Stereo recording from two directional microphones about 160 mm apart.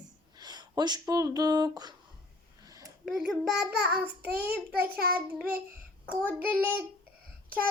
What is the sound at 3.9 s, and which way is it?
Child singing, 10° right (ahead or behind).